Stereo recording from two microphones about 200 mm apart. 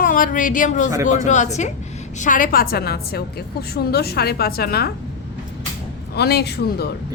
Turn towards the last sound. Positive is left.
turn(degrees=55)  # may be behind; listen again after turning